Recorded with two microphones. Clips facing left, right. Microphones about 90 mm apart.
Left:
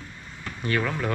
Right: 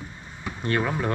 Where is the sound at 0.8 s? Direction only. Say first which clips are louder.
Right 1 dB; 15° right (ahead or behind).